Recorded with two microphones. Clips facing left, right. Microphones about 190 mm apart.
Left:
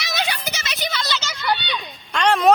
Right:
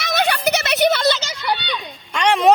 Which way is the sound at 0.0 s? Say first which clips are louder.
Right 7 dB; 55° right (ahead or behind).